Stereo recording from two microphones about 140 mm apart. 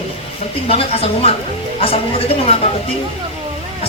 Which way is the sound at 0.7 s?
45° left (ahead or behind).